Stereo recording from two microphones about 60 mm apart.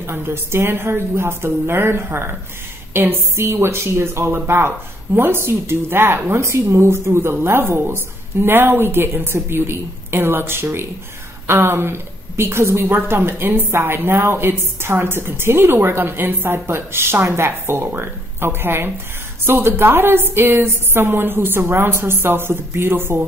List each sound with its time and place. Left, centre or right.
0.0 s a woman's voice: right